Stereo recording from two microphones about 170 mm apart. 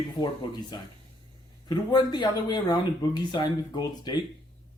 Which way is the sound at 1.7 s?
25° left (ahead or behind).